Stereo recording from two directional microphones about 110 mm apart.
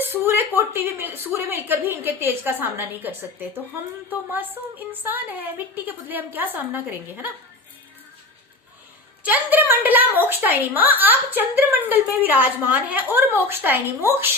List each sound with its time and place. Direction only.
0.0 s speech: 20° right (ahead or behind)
4.1 s speech: 15° right (ahead or behind)
9.2 s speech: 15° right (ahead or behind)